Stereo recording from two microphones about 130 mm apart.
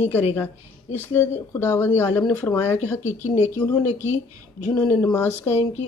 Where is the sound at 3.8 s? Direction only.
60° left (ahead or behind).